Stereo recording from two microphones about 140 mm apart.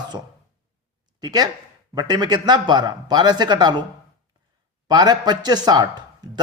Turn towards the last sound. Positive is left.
turn(degrees=-30)  # may be behind; listen again after turning